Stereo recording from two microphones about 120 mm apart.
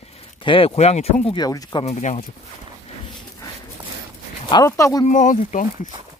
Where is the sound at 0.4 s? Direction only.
50° left (ahead or behind); by 1.3 s 65° left (ahead or behind).